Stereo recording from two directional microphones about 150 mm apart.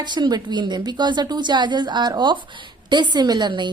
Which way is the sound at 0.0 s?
30° right (ahead or behind).